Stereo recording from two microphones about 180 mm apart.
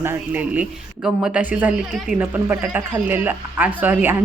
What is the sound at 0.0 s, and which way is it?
A man's voice, 10° right (ahead or behind).